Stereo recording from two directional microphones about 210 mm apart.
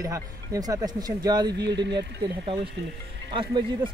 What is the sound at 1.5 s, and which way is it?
Speech, 55° right (ahead or behind).